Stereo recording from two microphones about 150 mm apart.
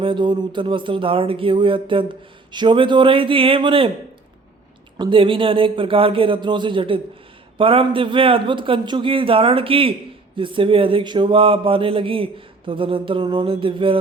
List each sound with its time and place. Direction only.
0.0 s speech: 35° right (ahead or behind)
4.9 s speech: 35° right (ahead or behind)